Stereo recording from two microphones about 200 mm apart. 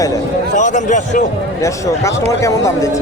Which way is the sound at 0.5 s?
40° left (ahead or behind).